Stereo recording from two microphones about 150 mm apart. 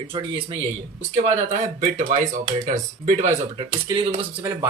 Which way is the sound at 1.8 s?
55° right (ahead or behind).